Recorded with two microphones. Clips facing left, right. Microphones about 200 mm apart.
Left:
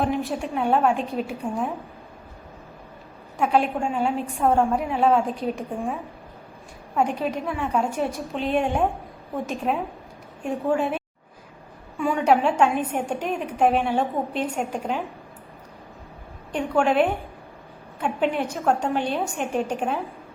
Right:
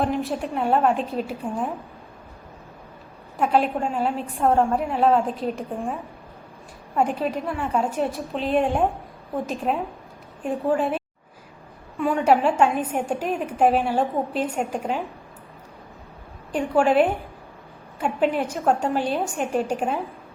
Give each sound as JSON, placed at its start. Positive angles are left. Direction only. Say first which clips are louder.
{"t": 0.0, "sound": "a woman's voice", "louder": "even", "side_deg": 0}
{"t": 3.3, "sound": "a woman's voice", "louder": "right 1 dB", "side_deg": 0}
{"t": 7.2, "sound": "a woman's voice", "louder": "right 1 dB", "side_deg": 0}
{"t": 10.4, "sound": "a woman's voice", "louder": "right 1 dB", "side_deg": 0}
{"t": 16.5, "sound": "a woman's voice", "louder": "right 2 dB", "side_deg": -5}